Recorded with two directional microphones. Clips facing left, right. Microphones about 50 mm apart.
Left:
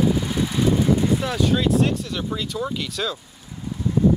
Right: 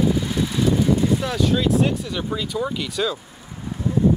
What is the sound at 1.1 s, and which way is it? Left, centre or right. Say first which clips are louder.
Speech: even; centre.